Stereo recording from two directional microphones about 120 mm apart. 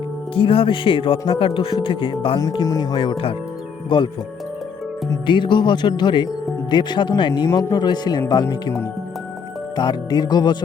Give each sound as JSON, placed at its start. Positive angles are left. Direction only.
{"t": 0.3, "sound": "speech", "side_deg": 50}
{"t": 2.4, "sound": "speech", "side_deg": 35}
{"t": 2.9, "sound": "speech", "side_deg": 45}
{"t": 5.2, "sound": "speech", "side_deg": 40}
{"t": 7.4, "sound": "speech", "side_deg": 25}
{"t": 9.7, "sound": "speech", "side_deg": 35}